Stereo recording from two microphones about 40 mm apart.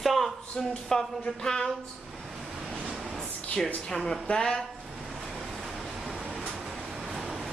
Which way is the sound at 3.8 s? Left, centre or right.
Centre.